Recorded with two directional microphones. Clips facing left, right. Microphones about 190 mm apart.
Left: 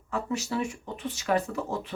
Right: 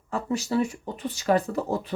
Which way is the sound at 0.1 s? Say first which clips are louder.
Right 4 dB; 35° right (ahead or behind).